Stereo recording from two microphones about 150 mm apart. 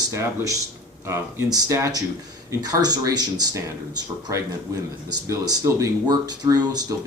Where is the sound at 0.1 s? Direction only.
20° right (ahead or behind).